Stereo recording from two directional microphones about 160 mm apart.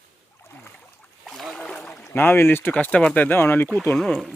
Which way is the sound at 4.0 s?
Centre (ahead or behind).